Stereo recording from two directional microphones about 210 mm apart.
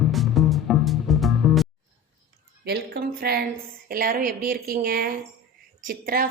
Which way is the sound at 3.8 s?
45° right (ahead or behind).